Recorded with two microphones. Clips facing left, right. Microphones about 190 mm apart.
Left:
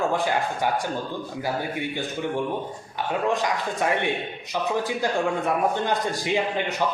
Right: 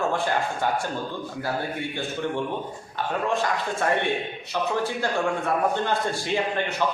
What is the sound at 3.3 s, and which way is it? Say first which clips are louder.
Speech: even; 15° left (ahead or behind).